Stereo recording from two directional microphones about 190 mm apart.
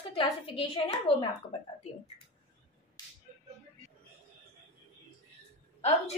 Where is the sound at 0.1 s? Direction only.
30° left (ahead or behind).